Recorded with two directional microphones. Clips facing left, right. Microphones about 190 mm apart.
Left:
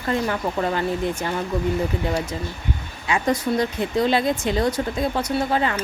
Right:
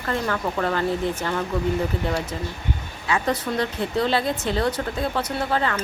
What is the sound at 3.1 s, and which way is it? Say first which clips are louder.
Speech: left 2 dB; 15° left (ahead or behind).